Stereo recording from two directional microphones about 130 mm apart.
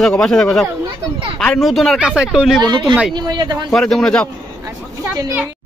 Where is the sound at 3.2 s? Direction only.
35° right (ahead or behind).